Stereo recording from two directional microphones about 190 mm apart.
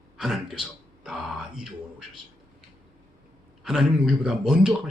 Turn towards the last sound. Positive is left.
turn(degrees=-5)  # may be behind; listen again after turning